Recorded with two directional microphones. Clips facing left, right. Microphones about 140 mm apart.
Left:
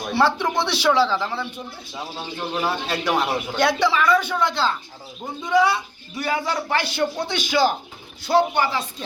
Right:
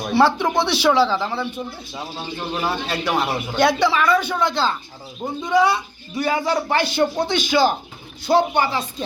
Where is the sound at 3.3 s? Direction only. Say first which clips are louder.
Right 2 dB; 15° right (ahead or behind).